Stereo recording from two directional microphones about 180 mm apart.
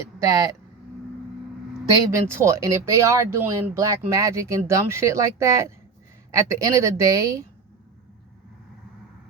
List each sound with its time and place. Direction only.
0.2 s speech: 20° right (ahead or behind)
1.9 s speech: 15° right (ahead or behind)